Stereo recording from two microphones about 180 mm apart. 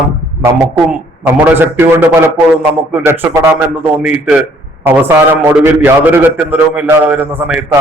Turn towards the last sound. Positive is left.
turn(degrees=-10)  # may be behind; listen again after turning